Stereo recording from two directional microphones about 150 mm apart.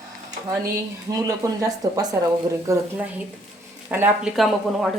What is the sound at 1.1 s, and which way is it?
Speech, 25° right (ahead or behind).